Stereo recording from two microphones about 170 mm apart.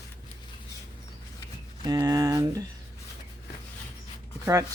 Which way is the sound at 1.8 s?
20° right (ahead or behind).